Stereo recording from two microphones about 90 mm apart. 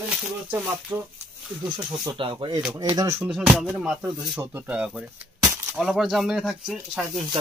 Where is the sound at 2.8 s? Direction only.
40° right (ahead or behind).